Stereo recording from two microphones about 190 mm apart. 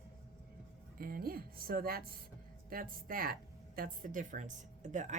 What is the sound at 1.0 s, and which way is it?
A woman's voice, 50° right (ahead or behind).